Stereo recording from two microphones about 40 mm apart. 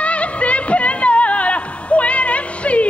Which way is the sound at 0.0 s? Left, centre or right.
Left.